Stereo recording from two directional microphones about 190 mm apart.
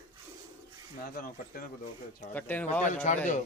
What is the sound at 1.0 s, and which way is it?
Speech, 50° left (ahead or behind).